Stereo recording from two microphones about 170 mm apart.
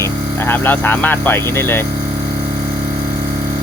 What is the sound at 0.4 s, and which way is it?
Speech, 10° left (ahead or behind).